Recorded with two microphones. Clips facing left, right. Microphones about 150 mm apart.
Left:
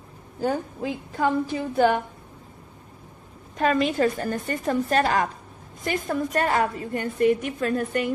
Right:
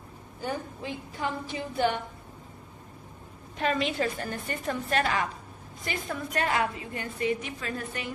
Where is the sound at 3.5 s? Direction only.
45° left (ahead or behind).